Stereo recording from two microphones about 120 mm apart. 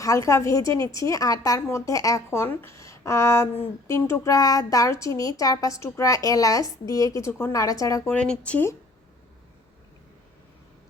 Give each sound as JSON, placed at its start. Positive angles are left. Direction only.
{"t": 0.0, "sound": "a woman's voice", "side_deg": 25}
{"t": 8.1, "sound": "speech", "side_deg": 10}